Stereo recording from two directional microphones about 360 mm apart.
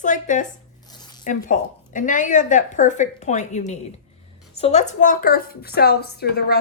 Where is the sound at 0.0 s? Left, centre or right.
Left.